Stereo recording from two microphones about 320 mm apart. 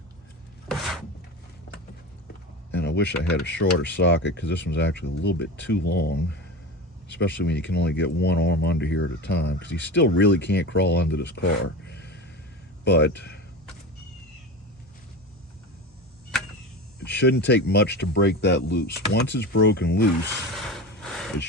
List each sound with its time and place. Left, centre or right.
2.7 s speech: left
11.3 s a sound: left
12.8 s speech: left
17.0 s speech: left
20.6 s vehicle: centre